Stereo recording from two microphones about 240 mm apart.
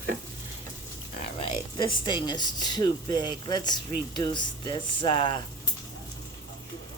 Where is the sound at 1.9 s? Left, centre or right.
Centre.